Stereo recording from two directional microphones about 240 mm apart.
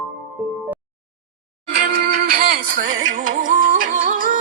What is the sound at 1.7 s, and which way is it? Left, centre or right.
Music, right.